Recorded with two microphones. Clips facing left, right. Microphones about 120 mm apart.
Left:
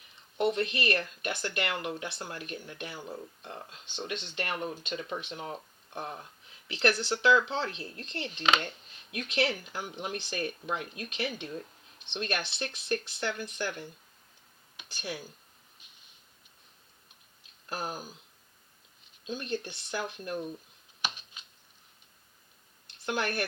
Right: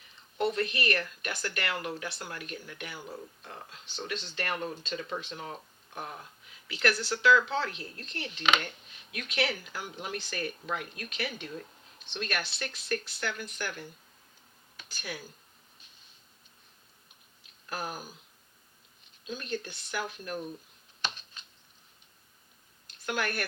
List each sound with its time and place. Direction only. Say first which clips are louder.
0.3 s speech: left 1 dB; 25° left (ahead or behind)
19.2 s speech: left 2 dB; 25° left (ahead or behind)
21.0 s a sound: even; 10° left (ahead or behind)
22.9 s speech: left 1 dB; 25° left (ahead or behind)